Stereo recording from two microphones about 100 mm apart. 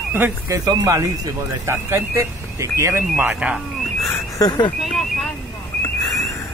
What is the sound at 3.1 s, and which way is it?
Speech, 15° right (ahead or behind).